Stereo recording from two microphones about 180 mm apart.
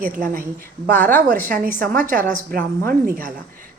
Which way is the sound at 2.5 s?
55° right (ahead or behind).